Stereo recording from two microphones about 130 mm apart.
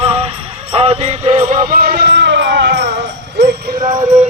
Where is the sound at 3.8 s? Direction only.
35° right (ahead or behind).